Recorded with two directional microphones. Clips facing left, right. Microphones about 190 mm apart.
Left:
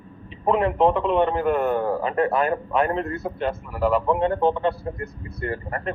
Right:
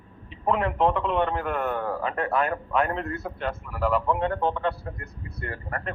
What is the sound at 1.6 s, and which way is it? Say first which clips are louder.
A man's voice: left 5 dB; 30° left (ahead or behind).